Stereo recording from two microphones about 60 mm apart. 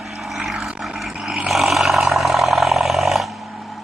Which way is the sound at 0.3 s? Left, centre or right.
Centre.